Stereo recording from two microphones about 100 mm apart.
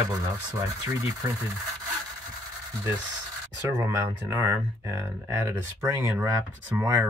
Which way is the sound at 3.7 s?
30° right (ahead or behind).